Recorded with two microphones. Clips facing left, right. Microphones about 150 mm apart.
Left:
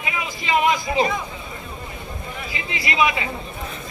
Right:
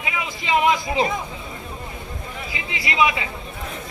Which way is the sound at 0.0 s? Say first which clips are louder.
Even; 25° right (ahead or behind).